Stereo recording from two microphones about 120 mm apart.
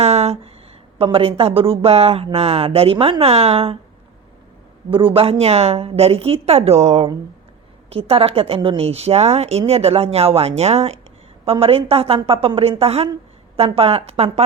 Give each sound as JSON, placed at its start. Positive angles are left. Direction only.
{"t": 0.0, "sound": "a sound", "side_deg": -60}
{"t": 0.9, "sound": "speech", "side_deg": -50}
{"t": 4.9, "sound": "a woman's voice", "side_deg": -45}